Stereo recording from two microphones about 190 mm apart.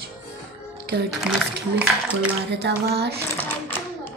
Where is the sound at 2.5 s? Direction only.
60° right (ahead or behind).